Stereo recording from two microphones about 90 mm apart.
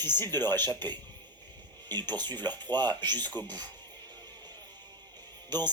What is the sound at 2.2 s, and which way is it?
Speech, 20° left (ahead or behind).